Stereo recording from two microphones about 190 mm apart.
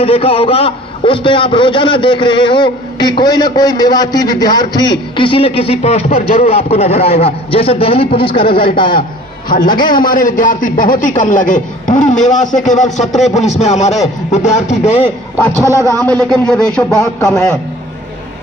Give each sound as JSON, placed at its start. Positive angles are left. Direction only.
{"t": 0.0, "sound": "a man's voice", "side_deg": 30}
{"t": 10.1, "sound": "a man's voice", "side_deg": 45}
{"t": 15.6, "sound": "speech", "side_deg": -15}
{"t": 16.1, "sound": "speech", "side_deg": 5}
{"t": 17.0, "sound": "a man's voice", "side_deg": 15}